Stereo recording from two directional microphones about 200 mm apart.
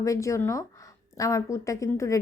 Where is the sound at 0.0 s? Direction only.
15° left (ahead or behind).